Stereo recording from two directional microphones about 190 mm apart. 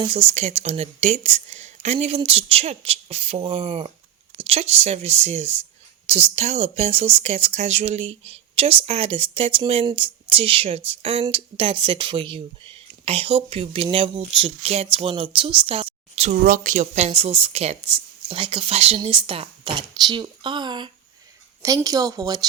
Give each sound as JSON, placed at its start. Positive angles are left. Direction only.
{"t": 0.0, "sound": "speech", "side_deg": -30}
{"t": 16.3, "sound": "speech", "side_deg": -45}